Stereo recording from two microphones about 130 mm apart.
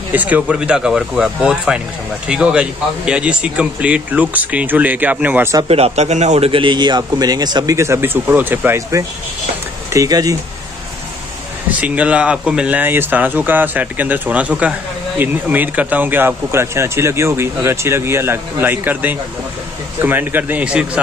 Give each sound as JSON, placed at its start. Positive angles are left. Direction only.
{"t": 0.1, "sound": "speech", "side_deg": -10}
{"t": 5.7, "sound": "a man's voice", "side_deg": -55}
{"t": 11.8, "sound": "speech", "side_deg": -10}